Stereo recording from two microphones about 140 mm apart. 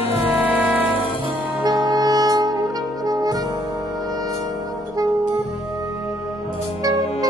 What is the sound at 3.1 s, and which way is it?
Music, 25° right (ahead or behind).